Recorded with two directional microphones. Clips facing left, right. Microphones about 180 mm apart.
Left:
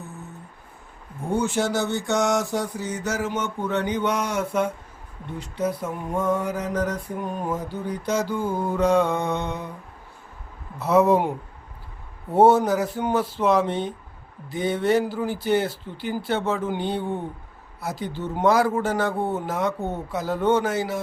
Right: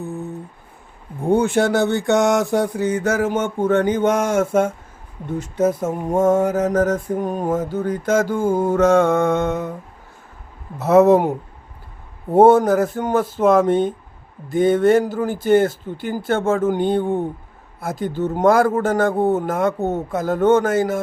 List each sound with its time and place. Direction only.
1.3 s mantra: 60° right (ahead or behind)
10.8 s mantra: 45° right (ahead or behind)
12.4 s mantra: 50° right (ahead or behind)
19.8 s speech: 25° right (ahead or behind)
20.1 s mantra: 50° right (ahead or behind)